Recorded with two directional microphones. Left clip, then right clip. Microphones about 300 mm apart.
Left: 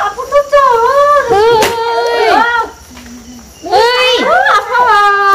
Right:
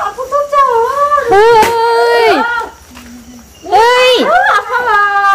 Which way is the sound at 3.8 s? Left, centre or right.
Centre.